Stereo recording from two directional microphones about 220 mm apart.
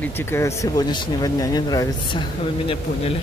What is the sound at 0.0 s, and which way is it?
Speech, 10° left (ahead or behind).